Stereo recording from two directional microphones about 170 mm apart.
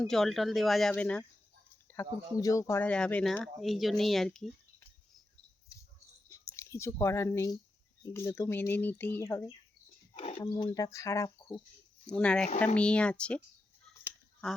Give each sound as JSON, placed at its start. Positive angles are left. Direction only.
{"t": 0.1, "sound": "speech", "side_deg": 0}
{"t": 1.9, "sound": "speech", "side_deg": 15}
{"t": 6.2, "sound": "speech", "side_deg": 20}
{"t": 10.2, "sound": "a sound", "side_deg": 40}
{"t": 10.4, "sound": "speech", "side_deg": 20}
{"t": 12.0, "sound": "speech", "side_deg": 5}
{"t": 14.4, "sound": "speech", "side_deg": 5}